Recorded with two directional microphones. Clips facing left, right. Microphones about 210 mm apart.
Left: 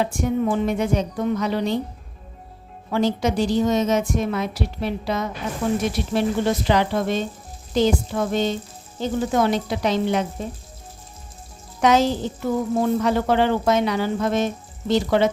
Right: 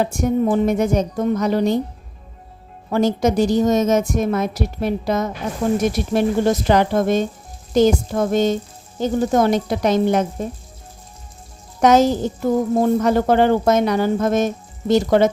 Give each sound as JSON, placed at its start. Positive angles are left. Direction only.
{"t": 0.0, "sound": "a woman's voice", "side_deg": -45}
{"t": 2.9, "sound": "a woman's voice", "side_deg": -45}
{"t": 11.8, "sound": "a woman's voice", "side_deg": -45}